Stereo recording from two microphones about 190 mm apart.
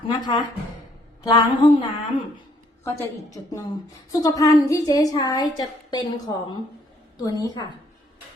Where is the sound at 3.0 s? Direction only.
15° left (ahead or behind).